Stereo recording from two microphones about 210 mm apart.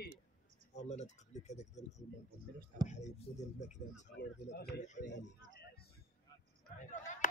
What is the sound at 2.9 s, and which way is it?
Speech, 35° left (ahead or behind).